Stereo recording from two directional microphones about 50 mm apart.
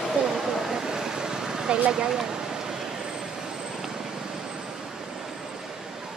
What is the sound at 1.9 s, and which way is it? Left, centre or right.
Vehicle, centre.